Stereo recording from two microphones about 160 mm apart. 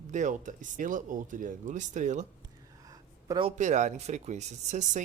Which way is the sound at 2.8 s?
20° right (ahead or behind).